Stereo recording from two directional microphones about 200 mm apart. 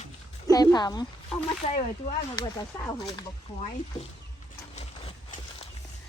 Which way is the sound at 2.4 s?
20° left (ahead or behind).